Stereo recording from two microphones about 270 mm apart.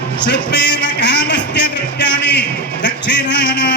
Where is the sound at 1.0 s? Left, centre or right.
Left.